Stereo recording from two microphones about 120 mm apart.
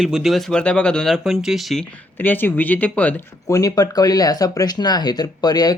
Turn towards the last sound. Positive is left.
turn(degrees=35)  # may be behind; listen again after turning